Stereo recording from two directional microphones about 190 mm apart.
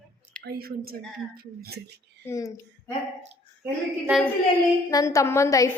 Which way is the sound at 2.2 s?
15° left (ahead or behind).